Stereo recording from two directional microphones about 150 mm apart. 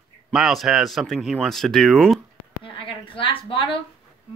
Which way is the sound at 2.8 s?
35° left (ahead or behind).